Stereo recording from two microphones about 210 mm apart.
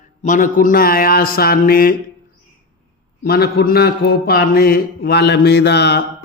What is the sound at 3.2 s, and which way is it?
Mantra, 45° left (ahead or behind).